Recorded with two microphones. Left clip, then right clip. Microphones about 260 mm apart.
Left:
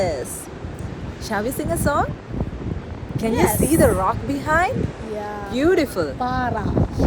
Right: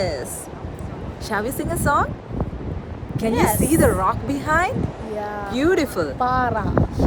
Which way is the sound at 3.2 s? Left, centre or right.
Centre.